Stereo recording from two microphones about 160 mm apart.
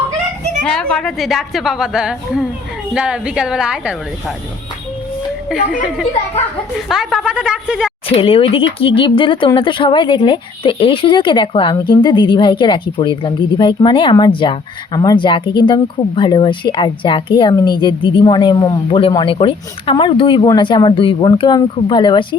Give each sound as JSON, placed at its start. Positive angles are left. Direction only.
{"t": 0.6, "sound": "a woman's voice", "side_deg": 5}
{"t": 5.5, "sound": "a woman's voice", "side_deg": -5}
{"t": 6.7, "sound": "a woman's voice", "side_deg": 0}
{"t": 8.0, "sound": "speech", "side_deg": 35}